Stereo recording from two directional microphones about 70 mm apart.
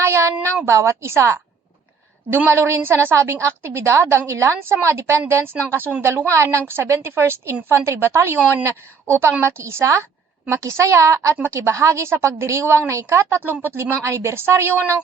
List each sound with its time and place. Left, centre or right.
0.0 s a sound: right
0.6 s speech: right
2.5 s a woman's voice: right